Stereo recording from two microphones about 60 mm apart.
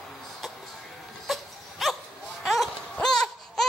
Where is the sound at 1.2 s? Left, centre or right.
Centre.